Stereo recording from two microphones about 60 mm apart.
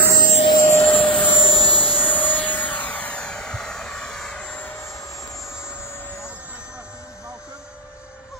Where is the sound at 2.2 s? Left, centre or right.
Left.